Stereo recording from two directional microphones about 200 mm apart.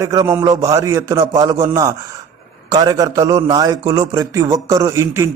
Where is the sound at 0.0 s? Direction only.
15° right (ahead or behind).